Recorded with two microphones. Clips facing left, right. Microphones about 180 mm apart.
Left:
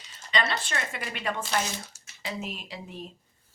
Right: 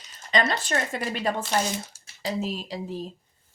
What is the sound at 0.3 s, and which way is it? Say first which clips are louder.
A woman's voice: right 4 dB; 45° right (ahead or behind).